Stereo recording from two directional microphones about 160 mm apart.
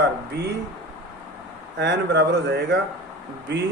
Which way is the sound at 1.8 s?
90° right.